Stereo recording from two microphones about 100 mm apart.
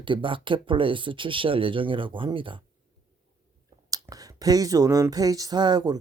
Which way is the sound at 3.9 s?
35° right (ahead or behind).